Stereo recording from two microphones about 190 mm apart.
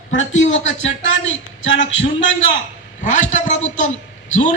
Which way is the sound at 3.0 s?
40° left (ahead or behind).